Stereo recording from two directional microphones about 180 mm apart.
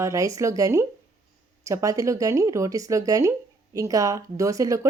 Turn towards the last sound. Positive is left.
turn(degrees=-20)  # may be behind; listen again after turning